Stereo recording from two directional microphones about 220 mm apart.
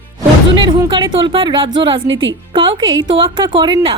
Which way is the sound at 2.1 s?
60° right (ahead or behind).